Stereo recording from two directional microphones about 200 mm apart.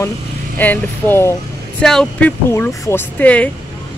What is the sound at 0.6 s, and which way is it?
Speech, 10° left (ahead or behind).